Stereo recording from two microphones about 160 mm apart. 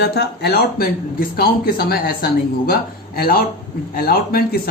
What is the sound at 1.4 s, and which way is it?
Speech, 75° left (ahead or behind).